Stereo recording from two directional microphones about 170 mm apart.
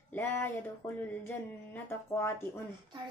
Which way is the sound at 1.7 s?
15° left (ahead or behind).